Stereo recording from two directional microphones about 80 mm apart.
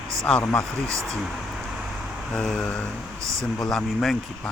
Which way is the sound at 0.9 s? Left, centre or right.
Right.